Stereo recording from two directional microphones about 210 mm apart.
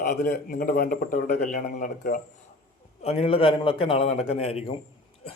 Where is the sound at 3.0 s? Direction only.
30° left (ahead or behind).